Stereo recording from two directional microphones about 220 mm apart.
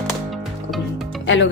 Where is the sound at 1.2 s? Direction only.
55° left (ahead or behind).